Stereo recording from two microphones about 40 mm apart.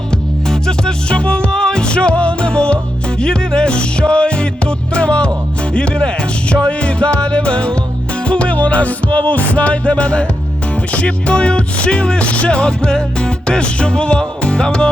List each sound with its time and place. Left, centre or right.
0.4 s music: centre
1.2 s music: left